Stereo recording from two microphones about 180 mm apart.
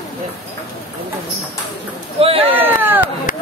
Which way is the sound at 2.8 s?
10° right (ahead or behind).